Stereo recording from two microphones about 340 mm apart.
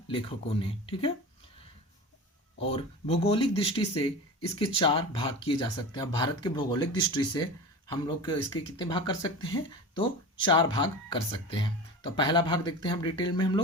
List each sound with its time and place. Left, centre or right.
0.1 s speech: centre
2.6 s speech: centre